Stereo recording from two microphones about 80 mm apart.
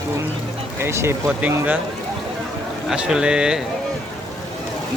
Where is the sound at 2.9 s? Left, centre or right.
Centre.